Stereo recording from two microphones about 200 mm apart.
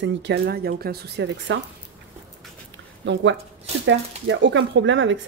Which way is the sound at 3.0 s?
65° right (ahead or behind).